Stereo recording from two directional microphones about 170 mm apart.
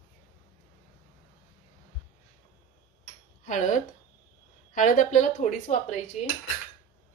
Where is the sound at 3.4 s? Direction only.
50° left (ahead or behind).